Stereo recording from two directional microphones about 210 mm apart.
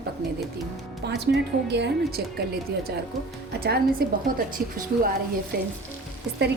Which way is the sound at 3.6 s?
45° right (ahead or behind).